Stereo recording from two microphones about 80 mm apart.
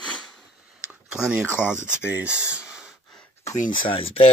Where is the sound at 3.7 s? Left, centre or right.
Left.